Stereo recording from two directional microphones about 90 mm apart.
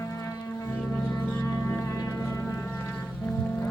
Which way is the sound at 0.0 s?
35° left (ahead or behind).